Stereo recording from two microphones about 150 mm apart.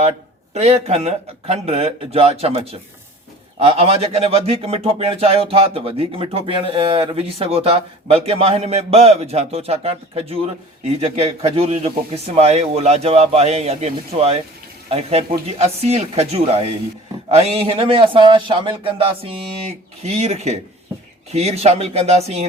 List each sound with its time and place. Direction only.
0.5 s speech: 45° right (ahead or behind)
3.6 s speech: 40° right (ahead or behind)